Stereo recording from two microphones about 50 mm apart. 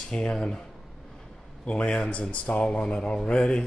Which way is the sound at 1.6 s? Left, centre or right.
Left.